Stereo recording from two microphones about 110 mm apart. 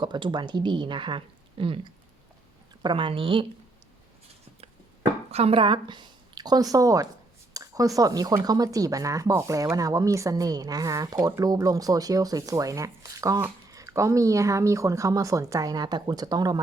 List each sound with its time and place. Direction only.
0.0 s speech: 45° right (ahead or behind)
5.3 s a woman's voice: 65° right (ahead or behind); by 16.6 s 35° right (ahead or behind)